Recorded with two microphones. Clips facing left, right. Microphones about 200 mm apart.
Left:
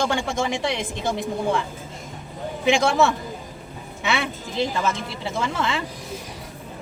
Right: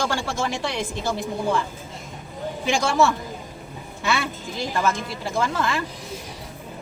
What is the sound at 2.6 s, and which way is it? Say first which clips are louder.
A woman's voice: left 2 dB; 20° left (ahead or behind).